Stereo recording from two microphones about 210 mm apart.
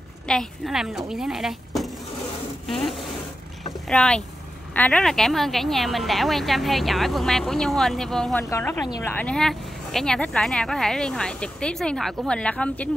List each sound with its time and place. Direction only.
0.3 s a woman's voice: centre (ahead or behind)